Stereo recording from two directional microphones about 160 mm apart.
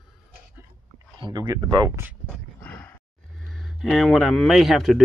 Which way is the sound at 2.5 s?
10° left (ahead or behind).